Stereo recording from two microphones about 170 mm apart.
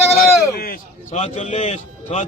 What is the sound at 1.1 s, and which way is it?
A man's voice, 45° left (ahead or behind).